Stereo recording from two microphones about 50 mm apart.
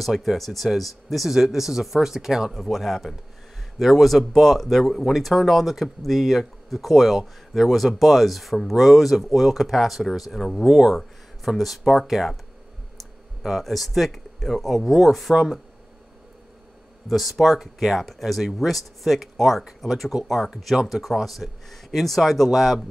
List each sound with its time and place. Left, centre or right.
0.0 s speech: centre
2.6 s speech: centre
17.1 s speech: centre